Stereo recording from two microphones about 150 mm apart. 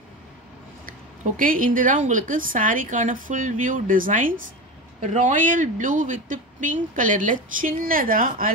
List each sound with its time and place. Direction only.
0.8 s speech: 65° right (ahead or behind)
5.0 s speech: 55° right (ahead or behind); by 8.5 s 70° right (ahead or behind)